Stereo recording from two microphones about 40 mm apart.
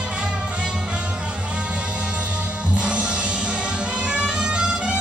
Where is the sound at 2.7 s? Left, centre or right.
Right.